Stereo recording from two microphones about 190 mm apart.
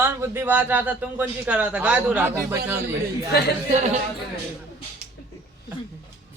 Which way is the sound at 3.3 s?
60° left (ahead or behind).